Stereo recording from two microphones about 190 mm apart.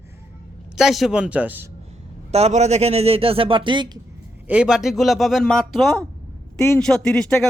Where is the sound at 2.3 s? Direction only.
35° right (ahead or behind).